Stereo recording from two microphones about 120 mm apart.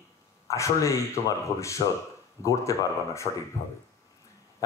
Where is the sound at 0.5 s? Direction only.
25° left (ahead or behind).